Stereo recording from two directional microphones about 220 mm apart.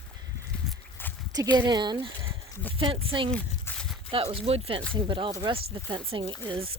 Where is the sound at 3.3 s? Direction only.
5° left (ahead or behind).